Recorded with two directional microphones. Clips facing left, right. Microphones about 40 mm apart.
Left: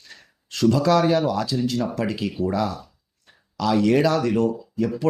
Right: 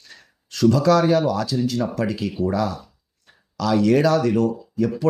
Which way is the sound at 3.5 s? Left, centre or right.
Centre.